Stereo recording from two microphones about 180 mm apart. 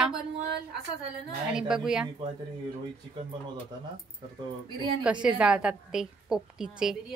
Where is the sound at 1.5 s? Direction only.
5° right (ahead or behind).